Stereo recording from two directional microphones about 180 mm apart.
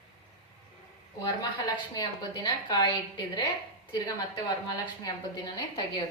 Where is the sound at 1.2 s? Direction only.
20° left (ahead or behind).